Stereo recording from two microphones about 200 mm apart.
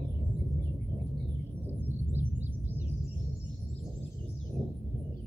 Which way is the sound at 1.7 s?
10° right (ahead or behind).